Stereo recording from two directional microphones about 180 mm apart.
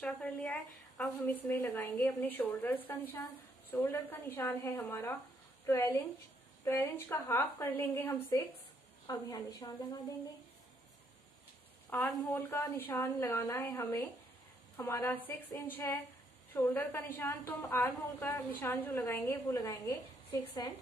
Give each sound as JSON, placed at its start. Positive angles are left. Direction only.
{"t": 0.0, "sound": "a woman's voice", "side_deg": 5}
{"t": 11.9, "sound": "a woman's voice", "side_deg": 10}